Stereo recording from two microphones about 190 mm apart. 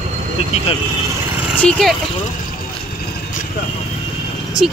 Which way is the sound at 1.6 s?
Centre (ahead or behind).